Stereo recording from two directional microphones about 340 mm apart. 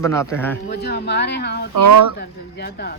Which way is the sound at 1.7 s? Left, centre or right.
Right.